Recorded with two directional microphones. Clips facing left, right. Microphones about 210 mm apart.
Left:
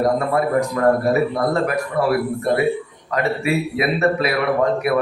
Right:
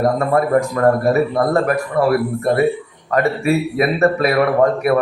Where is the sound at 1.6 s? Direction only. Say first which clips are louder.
Right 3 dB; 45° right (ahead or behind).